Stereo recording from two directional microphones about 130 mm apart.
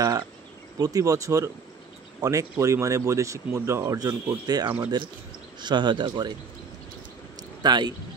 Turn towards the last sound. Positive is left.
turn(degrees=-35)  # may be behind; listen again after turning